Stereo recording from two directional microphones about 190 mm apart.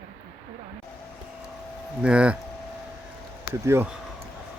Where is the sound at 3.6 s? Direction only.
10° right (ahead or behind).